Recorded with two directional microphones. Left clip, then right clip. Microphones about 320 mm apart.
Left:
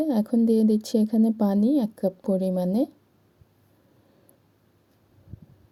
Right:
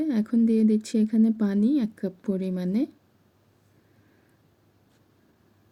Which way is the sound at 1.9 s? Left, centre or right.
Left.